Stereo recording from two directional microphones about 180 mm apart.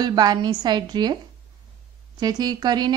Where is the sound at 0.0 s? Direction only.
25° right (ahead or behind).